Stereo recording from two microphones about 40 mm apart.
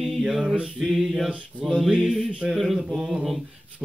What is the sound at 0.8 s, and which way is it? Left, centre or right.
Mantra, centre.